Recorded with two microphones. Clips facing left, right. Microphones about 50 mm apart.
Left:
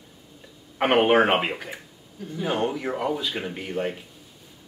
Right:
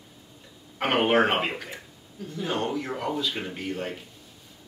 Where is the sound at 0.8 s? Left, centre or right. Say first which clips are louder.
Left 3 dB; centre.